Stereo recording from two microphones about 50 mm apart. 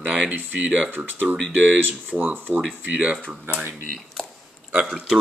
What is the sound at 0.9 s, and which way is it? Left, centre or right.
Speech, right.